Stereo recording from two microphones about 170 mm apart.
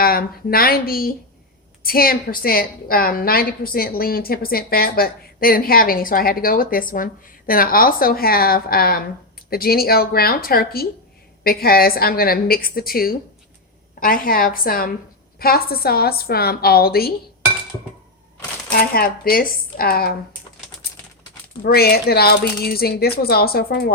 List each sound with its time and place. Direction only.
0.0 s a woman's voice: 60° left (ahead or behind)
18.7 s a woman's voice: 60° left (ahead or behind)
21.6 s a woman's voice: 65° left (ahead or behind)